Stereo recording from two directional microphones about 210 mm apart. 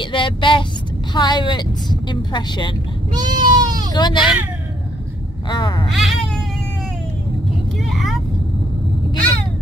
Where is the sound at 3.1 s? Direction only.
20° right (ahead or behind).